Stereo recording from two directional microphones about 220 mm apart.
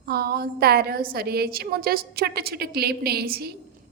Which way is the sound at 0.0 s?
45° right (ahead or behind).